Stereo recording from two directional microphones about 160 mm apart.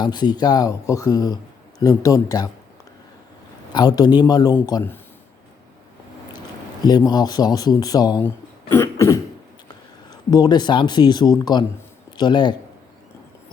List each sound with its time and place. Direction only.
0.0 s speech: 25° left (ahead or behind)
3.7 s a man's voice: 25° left (ahead or behind)
6.8 s speech: 25° left (ahead or behind)
8.7 s cough: 15° left (ahead or behind)
9.6 s speech: 25° left (ahead or behind)